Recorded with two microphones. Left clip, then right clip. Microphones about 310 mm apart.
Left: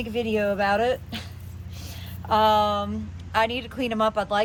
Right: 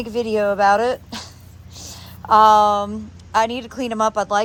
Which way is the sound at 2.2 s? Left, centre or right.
Centre.